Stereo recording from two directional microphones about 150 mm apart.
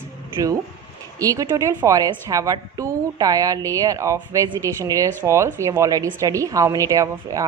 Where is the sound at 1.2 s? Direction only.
20° right (ahead or behind).